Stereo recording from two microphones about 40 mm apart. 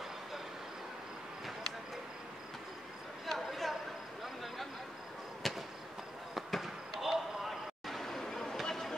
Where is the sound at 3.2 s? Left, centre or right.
Centre.